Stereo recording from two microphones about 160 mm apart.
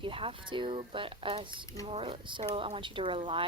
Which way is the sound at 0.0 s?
35° right (ahead or behind).